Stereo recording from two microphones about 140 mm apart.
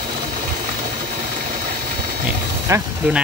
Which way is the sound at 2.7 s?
20° right (ahead or behind).